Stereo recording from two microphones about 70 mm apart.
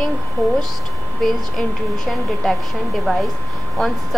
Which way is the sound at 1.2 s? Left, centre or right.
Centre.